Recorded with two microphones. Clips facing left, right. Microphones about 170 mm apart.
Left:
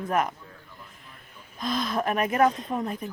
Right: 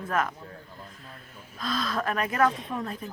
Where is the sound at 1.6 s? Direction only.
20° left (ahead or behind).